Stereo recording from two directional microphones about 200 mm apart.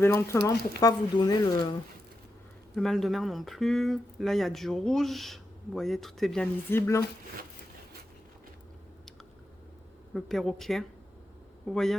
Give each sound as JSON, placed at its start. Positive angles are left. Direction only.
{"t": 0.0, "sound": "speech", "side_deg": 15}
{"t": 2.7, "sound": "speech", "side_deg": 0}
{"t": 10.2, "sound": "speech", "side_deg": 0}